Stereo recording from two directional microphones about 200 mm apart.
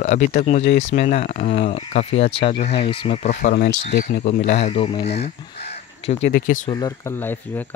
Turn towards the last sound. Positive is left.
turn(degrees=10)  # may be behind; listen again after turning